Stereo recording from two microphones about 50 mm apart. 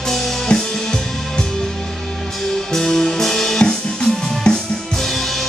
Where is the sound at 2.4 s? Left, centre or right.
Centre.